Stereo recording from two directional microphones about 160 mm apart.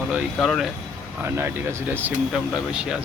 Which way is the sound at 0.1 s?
Centre (ahead or behind).